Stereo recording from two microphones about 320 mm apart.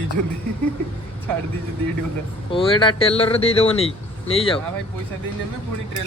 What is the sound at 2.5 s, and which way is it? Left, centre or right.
Speech, centre.